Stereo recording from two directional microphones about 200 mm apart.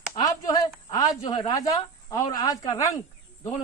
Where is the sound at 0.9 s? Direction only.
20° left (ahead or behind).